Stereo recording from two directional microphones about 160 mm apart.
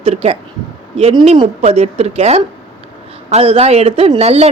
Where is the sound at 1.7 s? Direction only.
40° right (ahead or behind).